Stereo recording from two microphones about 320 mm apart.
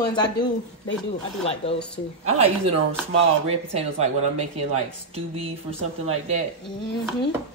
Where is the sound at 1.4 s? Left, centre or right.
Centre.